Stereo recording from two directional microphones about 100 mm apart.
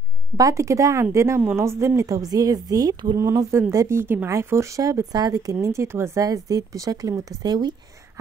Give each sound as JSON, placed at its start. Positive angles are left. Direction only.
{"t": 0.4, "sound": "speech", "side_deg": -35}
{"t": 3.2, "sound": "speech", "side_deg": -30}